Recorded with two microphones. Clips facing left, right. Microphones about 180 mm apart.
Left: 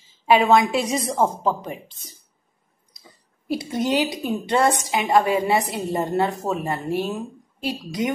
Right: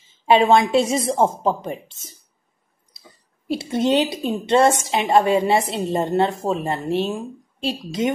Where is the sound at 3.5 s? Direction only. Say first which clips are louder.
Right 3 dB; 25° right (ahead or behind).